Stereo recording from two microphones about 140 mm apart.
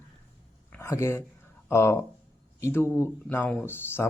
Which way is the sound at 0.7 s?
20° left (ahead or behind).